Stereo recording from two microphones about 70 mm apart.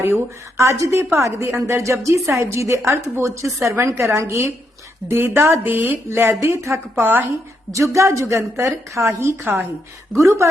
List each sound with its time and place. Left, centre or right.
0.0 s a woman's voice: right
6.1 s speech: right
7.0 s a woman's voice: right
7.7 s a woman's voice: right